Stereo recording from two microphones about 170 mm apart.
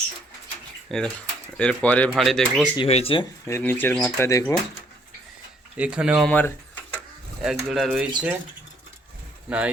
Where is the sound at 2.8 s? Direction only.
35° left (ahead or behind).